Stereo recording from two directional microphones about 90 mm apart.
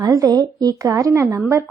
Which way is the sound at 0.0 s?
45° right (ahead or behind).